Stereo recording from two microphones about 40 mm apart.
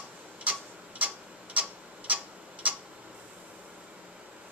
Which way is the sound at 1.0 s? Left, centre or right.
Right.